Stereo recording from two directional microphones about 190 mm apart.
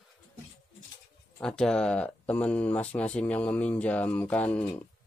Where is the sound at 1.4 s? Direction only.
5° left (ahead or behind).